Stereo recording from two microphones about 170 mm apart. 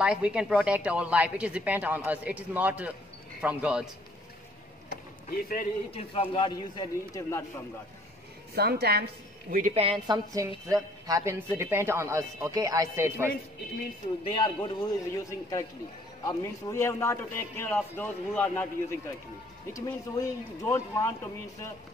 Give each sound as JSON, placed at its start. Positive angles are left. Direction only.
{"t": 0.0, "sound": "a woman's voice", "side_deg": -5}
{"t": 5.3, "sound": "a man's voice", "side_deg": 55}
{"t": 5.9, "sound": "a man's voice", "side_deg": 35}
{"t": 8.5, "sound": "a woman's voice", "side_deg": -70}
{"t": 9.8, "sound": "a woman's voice", "side_deg": -30}
{"t": 14.2, "sound": "a man's voice", "side_deg": 25}